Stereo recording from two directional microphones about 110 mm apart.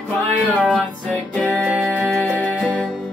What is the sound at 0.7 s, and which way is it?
Music, 10° left (ahead or behind).